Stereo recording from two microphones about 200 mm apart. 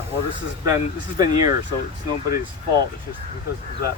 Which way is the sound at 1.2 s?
20° right (ahead or behind).